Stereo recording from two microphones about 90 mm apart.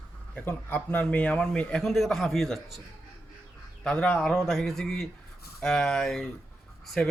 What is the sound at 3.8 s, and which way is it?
A man's voice, 15° left (ahead or behind).